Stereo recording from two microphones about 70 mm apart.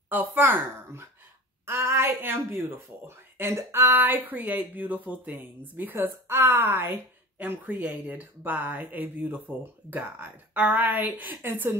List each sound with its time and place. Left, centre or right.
0.1 s speech: right
1.7 s a sound: right
3.1 s speech: right
4.0 s speech: right